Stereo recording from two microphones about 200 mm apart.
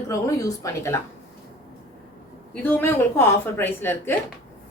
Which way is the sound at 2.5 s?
10° left (ahead or behind).